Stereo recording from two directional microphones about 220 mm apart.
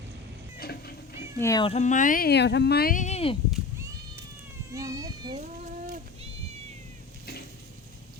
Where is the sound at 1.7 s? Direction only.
35° left (ahead or behind).